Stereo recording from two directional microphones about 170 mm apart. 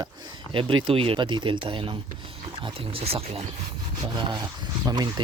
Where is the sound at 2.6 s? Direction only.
35° right (ahead or behind).